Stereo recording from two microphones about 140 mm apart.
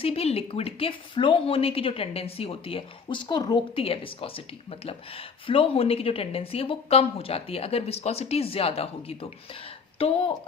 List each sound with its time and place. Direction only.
0.0 s a woman's voice: 45° left (ahead or behind)